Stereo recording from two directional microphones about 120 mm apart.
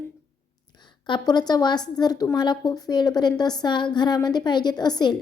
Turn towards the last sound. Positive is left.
turn(degrees=35)  # may be behind; listen again after turning